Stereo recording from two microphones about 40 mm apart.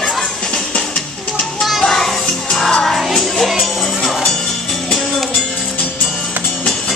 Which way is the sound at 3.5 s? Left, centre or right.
Centre.